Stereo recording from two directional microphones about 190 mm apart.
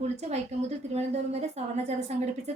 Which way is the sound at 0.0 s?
35° right (ahead or behind).